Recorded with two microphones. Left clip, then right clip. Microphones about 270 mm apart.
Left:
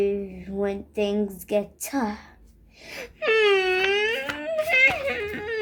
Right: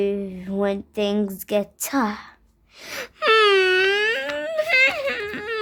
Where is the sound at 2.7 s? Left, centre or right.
Right.